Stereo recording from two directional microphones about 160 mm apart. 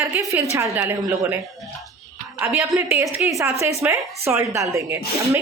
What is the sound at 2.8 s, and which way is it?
A woman's voice, 15° right (ahead or behind).